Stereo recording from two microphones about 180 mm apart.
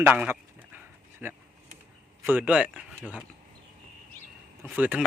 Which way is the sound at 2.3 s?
10° right (ahead or behind).